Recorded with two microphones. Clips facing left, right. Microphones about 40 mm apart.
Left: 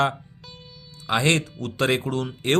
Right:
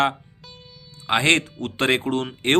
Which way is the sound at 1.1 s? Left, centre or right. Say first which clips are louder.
Right 3 dB; right.